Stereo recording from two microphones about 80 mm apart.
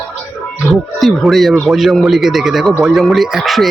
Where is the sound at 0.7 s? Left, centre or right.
Centre.